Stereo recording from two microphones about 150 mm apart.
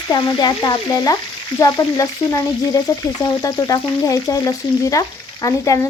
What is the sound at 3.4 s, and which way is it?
Frying, 25° left (ahead or behind).